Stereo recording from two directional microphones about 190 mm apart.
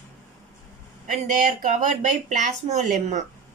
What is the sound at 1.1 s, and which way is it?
Speech, 40° right (ahead or behind).